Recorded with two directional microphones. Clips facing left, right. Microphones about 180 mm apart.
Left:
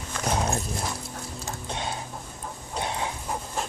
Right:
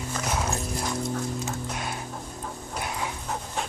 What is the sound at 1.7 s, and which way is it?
Music, 25° left (ahead or behind).